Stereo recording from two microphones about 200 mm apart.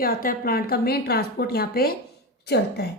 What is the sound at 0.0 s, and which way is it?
A woman's voice, 45° left (ahead or behind).